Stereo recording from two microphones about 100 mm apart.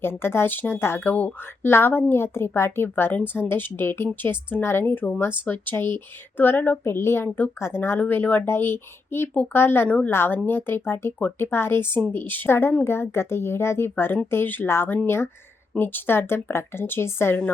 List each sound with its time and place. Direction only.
0.0 s speech: 25° left (ahead or behind)